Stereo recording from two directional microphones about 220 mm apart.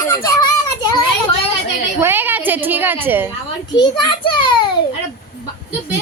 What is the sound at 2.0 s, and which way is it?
A woman's voice, 10° right (ahead or behind).